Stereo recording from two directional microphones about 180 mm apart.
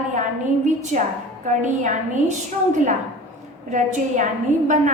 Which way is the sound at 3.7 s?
45° right (ahead or behind).